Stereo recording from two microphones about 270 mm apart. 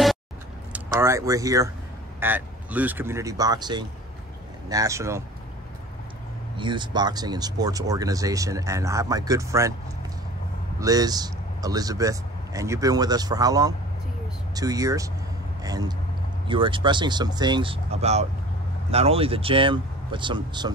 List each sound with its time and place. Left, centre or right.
0.7 s speech: centre
6.5 s speech: centre
10.8 s speech: centre